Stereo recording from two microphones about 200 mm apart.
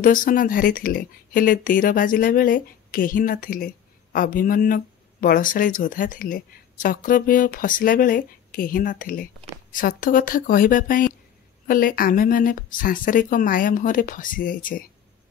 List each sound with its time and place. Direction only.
0.0 s speech: 45° left (ahead or behind)